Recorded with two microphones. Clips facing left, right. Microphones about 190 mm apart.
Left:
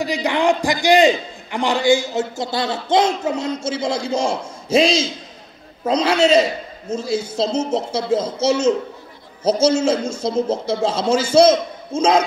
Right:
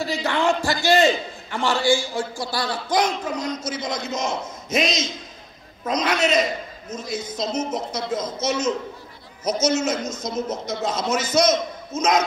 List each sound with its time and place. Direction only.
0.0 s a man's voice: 15° left (ahead or behind)